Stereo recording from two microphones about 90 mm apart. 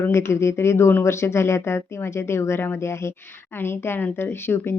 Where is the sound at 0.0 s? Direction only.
30° left (ahead or behind).